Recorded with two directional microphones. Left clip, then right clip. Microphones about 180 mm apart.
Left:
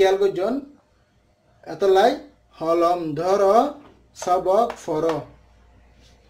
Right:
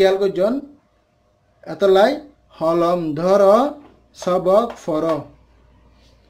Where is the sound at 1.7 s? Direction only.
45° right (ahead or behind).